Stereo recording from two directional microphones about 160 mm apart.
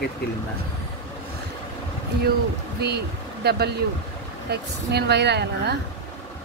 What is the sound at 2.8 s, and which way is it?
Speech, 90° right.